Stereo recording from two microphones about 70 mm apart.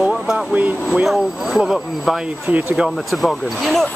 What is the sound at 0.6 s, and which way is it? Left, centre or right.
Speech, right.